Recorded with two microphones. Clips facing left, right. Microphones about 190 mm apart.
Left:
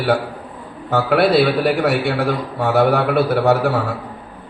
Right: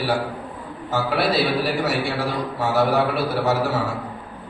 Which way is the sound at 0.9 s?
60° left (ahead or behind).